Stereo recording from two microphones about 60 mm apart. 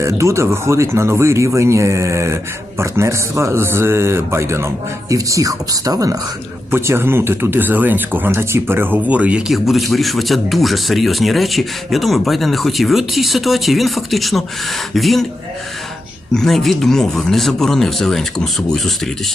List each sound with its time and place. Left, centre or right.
0.0 s speech: right
5.1 s speech: right
6.7 s speech: right
9.5 s speech: centre
16.3 s speech: centre